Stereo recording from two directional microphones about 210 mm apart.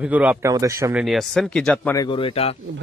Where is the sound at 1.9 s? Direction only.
20° left (ahead or behind).